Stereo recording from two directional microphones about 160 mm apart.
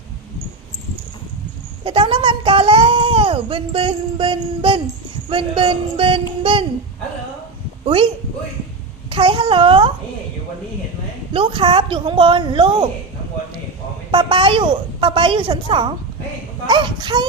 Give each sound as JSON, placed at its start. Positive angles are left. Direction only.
{"t": 1.8, "sound": "a woman's voice", "side_deg": -35}
{"t": 7.9, "sound": "a woman's voice", "side_deg": -30}
{"t": 11.3, "sound": "a woman's voice", "side_deg": -30}
{"t": 14.1, "sound": "a woman's voice", "side_deg": -30}